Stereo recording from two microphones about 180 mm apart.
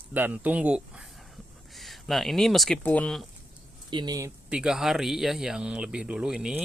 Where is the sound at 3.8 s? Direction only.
25° right (ahead or behind).